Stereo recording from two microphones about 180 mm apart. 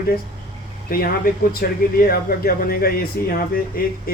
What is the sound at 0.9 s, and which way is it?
A man's voice, 55° left (ahead or behind).